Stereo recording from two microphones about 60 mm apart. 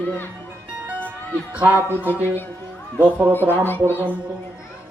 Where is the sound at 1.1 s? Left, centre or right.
Right.